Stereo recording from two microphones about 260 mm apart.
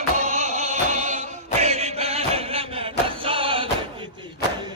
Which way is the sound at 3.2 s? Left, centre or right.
Centre.